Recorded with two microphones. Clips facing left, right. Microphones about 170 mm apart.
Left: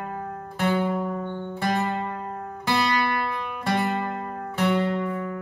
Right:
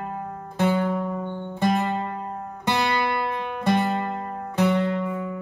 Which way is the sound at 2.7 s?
20° right (ahead or behind).